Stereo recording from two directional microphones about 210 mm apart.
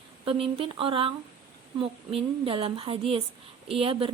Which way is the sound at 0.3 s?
25° right (ahead or behind).